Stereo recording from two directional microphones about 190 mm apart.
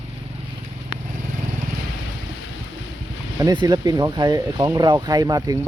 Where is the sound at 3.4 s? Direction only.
25° right (ahead or behind).